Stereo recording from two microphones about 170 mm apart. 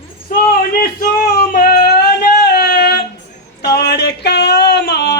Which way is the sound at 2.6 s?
70° left (ahead or behind).